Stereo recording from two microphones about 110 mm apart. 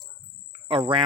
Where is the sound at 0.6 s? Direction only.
65° right (ahead or behind).